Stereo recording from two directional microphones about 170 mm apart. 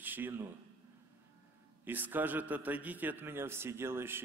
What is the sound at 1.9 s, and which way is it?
A man's voice, 10° right (ahead or behind).